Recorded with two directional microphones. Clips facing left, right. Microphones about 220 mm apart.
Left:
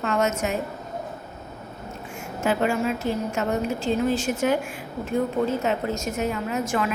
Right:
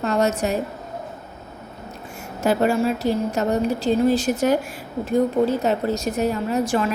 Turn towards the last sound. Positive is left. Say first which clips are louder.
# right 4 dB
turn(degrees=-35)  # may be behind; listen again after turning